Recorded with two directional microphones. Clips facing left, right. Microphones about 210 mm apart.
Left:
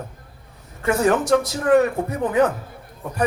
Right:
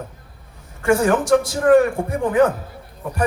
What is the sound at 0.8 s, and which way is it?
A man's voice, 30° right (ahead or behind).